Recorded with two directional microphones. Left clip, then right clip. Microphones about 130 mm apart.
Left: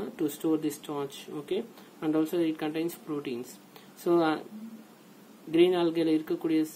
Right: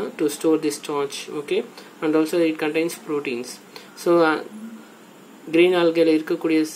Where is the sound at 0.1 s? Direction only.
25° left (ahead or behind).